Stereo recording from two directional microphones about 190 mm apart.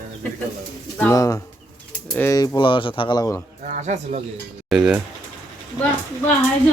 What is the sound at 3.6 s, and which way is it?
Speech, 40° right (ahead or behind).